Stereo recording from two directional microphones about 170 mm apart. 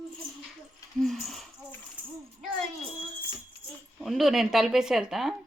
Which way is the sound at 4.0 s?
5° right (ahead or behind).